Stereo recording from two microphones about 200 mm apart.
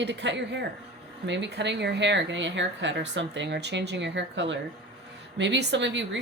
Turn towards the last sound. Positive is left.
turn(degrees=-65)  # may be behind; listen again after turning